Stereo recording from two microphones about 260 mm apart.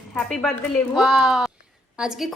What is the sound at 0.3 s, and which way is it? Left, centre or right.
A woman's voice, centre.